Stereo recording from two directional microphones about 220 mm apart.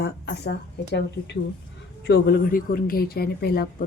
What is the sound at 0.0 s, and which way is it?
Speech, 45° left (ahead or behind).